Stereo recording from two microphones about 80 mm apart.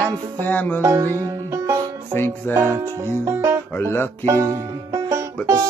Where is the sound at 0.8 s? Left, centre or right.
Right.